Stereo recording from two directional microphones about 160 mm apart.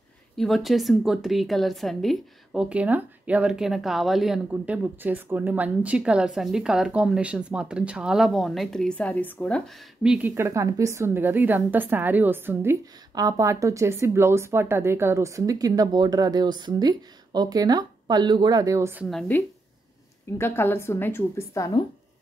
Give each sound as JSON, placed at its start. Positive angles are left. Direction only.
{"t": 0.4, "sound": "a woman's voice", "side_deg": 0}
{"t": 9.7, "sound": "a woman's voice", "side_deg": -5}
{"t": 19.0, "sound": "a woman's voice", "side_deg": 0}
{"t": 20.3, "sound": "a woman's voice", "side_deg": 15}